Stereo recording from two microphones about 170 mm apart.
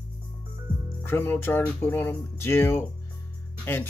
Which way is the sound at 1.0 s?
10° left (ahead or behind).